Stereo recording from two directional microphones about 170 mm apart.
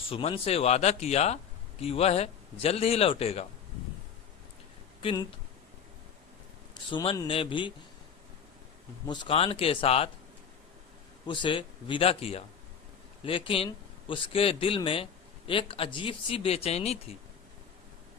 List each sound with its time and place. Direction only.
0.1 s a man's voice: 35° left (ahead or behind)
6.9 s a man's voice: 30° left (ahead or behind)
9.0 s a man's voice: 35° left (ahead or behind)
11.3 s a man's voice: 30° left (ahead or behind)